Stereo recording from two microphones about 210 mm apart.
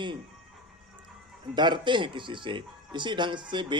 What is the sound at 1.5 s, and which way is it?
Speech, 20° right (ahead or behind).